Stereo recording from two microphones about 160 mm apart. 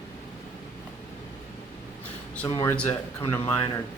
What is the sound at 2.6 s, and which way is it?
Speech, 15° left (ahead or behind).